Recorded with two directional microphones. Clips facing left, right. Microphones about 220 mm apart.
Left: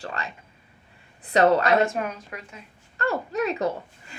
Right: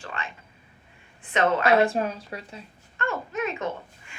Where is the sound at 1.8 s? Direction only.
30° right (ahead or behind).